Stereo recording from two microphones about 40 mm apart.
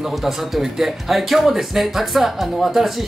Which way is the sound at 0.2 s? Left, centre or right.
Centre.